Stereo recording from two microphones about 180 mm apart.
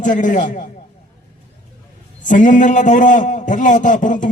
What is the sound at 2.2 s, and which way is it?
A man's voice, 45° left (ahead or behind).